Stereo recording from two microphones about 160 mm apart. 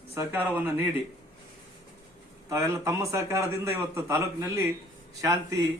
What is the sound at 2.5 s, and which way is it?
A man's voice, 20° right (ahead or behind).